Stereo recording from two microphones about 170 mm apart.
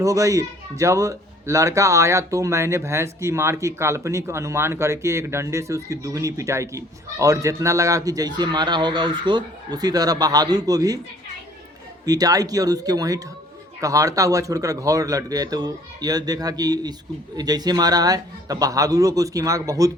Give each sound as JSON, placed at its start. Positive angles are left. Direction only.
{"t": 0.0, "sound": "a man's voice", "side_deg": -20}
{"t": 12.0, "sound": "a man's voice", "side_deg": -20}